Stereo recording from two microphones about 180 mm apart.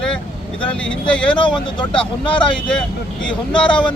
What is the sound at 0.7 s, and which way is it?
Speech, 5° left (ahead or behind).